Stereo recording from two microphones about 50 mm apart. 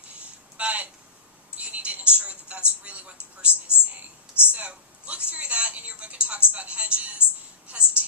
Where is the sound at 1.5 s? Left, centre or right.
Right.